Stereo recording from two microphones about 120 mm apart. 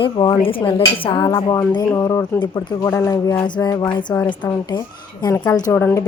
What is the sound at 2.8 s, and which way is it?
Speech, 25° left (ahead or behind).